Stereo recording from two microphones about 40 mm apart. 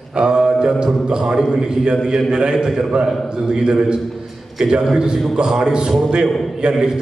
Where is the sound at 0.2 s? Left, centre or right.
Centre.